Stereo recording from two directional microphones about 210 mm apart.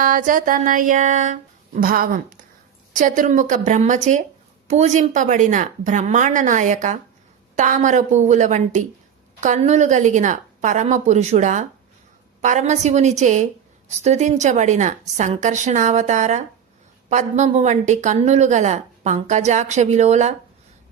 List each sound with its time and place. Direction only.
0.0 s speech: 40° right (ahead or behind)